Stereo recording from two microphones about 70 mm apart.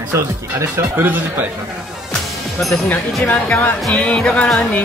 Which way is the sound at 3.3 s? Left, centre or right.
Left.